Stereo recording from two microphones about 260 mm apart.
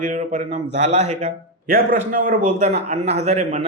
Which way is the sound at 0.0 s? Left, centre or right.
Right.